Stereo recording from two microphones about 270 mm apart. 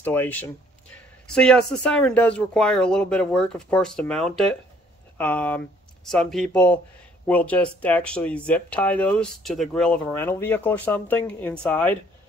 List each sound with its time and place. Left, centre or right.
0.0 s speech: centre